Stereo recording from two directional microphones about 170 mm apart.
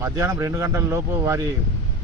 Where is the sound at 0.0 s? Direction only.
15° right (ahead or behind).